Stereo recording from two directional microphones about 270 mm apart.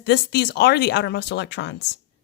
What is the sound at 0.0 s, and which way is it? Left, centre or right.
A woman's voice, left.